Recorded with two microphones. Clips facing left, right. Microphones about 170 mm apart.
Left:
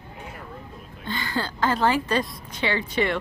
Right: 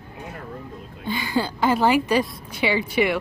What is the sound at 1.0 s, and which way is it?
Speech, 10° right (ahead or behind).